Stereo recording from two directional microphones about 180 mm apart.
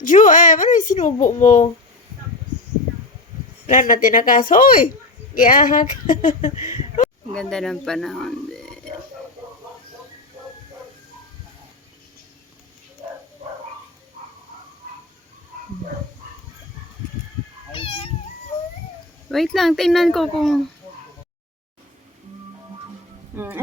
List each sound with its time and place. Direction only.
0.0 s a child's voice: 45° left (ahead or behind)
3.7 s speech: 45° left (ahead or behind)
7.3 s speech: 5° left (ahead or behind)
17.7 s cat: 30° left (ahead or behind)
19.3 s speech: centre (ahead or behind)
23.3 s speech: 10° right (ahead or behind)